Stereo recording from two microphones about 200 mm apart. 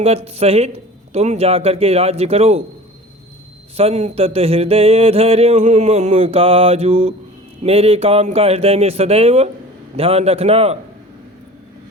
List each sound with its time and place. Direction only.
0.0 s a man's voice: 30° right (ahead or behind)
3.8 s speech: 30° right (ahead or behind)